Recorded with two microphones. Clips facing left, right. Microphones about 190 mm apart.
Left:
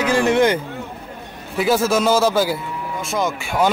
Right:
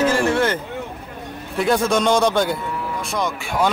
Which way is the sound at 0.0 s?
15° left (ahead or behind).